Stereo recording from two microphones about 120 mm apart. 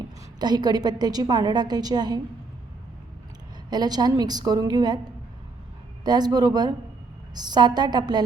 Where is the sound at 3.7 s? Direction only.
35° right (ahead or behind).